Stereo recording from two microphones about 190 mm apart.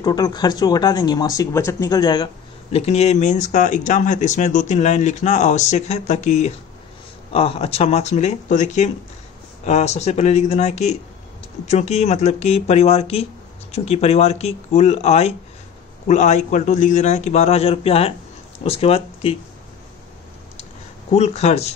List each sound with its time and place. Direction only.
0.0 s speech: 20° left (ahead or behind)
2.7 s speech: 35° left (ahead or behind)
21.1 s speech: 35° left (ahead or behind)